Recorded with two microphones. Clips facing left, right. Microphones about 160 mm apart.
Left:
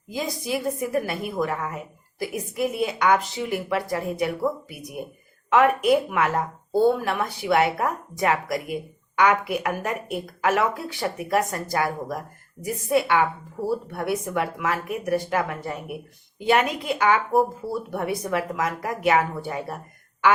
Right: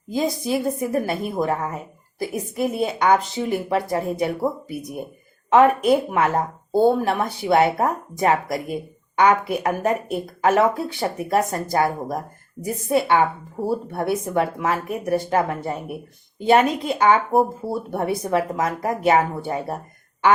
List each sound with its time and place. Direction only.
0.1 s speech: 30° right (ahead or behind)